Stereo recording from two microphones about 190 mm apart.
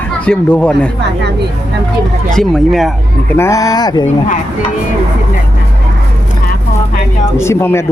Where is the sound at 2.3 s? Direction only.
Centre (ahead or behind).